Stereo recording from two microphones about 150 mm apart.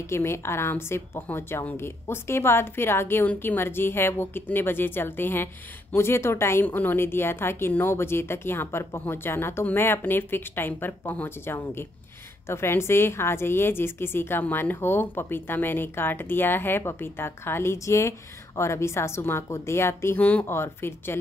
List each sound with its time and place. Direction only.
0.0 s a woman's voice: 15° left (ahead or behind)